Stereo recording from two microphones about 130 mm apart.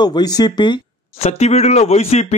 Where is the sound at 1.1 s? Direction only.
55° left (ahead or behind).